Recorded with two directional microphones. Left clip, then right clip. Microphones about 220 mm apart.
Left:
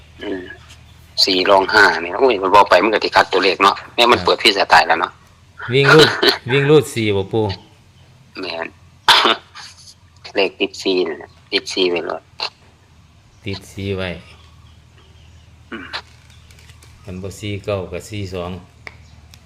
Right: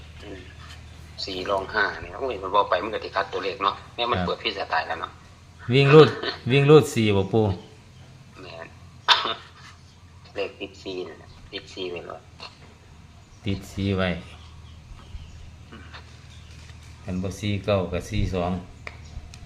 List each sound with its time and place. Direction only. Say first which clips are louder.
1.2 s speech: left 14 dB; 50° left (ahead or behind)
6.5 s speech: right 2 dB; 25° left (ahead or behind)
8.4 s throat clearing: left 15 dB; 50° left (ahead or behind)
10.2 s speech: left 13 dB; 45° left (ahead or behind)
13.4 s speech: left 3 dB; 25° left (ahead or behind)
15.7 s speech: left 16 dB; 50° left (ahead or behind)
17.1 s speech: left 3 dB; 35° left (ahead or behind)